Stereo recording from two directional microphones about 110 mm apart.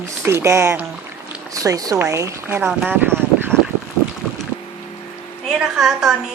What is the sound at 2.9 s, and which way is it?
Music, 20° right (ahead or behind).